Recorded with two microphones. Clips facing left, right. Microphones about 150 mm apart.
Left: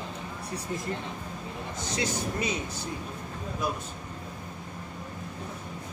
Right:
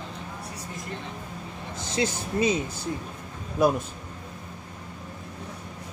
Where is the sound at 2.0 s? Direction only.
25° right (ahead or behind).